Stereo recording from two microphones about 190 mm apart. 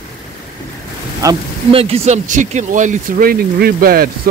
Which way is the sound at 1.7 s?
30° right (ahead or behind).